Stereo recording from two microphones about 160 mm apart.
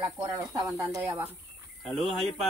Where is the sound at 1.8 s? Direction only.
Centre (ahead or behind).